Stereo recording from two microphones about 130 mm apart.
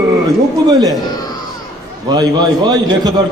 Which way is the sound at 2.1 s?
30° right (ahead or behind).